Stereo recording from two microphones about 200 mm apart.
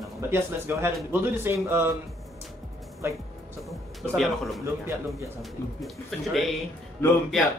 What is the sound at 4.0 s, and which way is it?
Speech, centre (ahead or behind).